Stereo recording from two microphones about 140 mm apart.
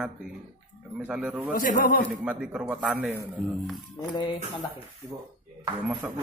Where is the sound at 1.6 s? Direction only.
75° left (ahead or behind).